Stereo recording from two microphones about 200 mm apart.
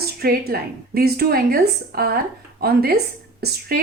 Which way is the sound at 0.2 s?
50° right (ahead or behind).